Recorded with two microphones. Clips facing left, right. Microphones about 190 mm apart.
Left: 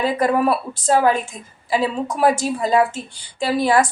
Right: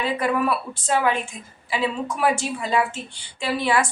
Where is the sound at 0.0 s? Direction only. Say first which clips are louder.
Left 5 dB; 40° left (ahead or behind).